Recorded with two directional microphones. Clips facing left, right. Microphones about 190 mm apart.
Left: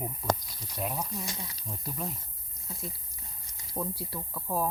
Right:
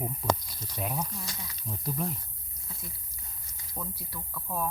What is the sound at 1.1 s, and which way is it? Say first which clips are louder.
Speech: left 3 dB; 25° left (ahead or behind).